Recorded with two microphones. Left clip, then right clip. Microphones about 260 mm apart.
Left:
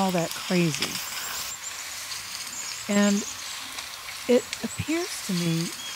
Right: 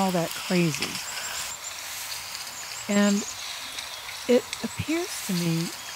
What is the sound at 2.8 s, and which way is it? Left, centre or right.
Speech, centre.